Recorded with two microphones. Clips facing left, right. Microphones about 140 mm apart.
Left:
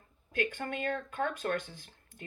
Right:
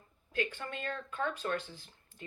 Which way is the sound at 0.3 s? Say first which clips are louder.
Left 3 dB; 50° left (ahead or behind).